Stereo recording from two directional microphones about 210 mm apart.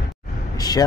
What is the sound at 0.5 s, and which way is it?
Speech, 20° left (ahead or behind).